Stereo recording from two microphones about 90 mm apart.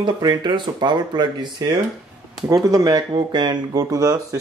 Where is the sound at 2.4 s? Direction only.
40° right (ahead or behind).